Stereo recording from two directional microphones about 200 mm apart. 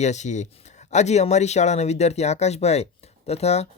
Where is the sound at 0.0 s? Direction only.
35° left (ahead or behind).